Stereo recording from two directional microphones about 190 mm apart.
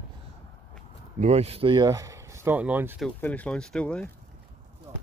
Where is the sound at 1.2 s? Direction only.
35° right (ahead or behind); by 3.0 s 10° right (ahead or behind).